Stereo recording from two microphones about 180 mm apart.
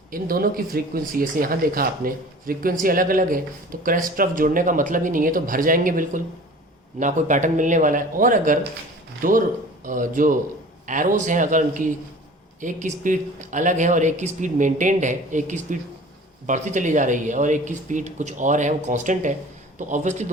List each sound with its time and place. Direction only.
0.1 s speech: 55° right (ahead or behind)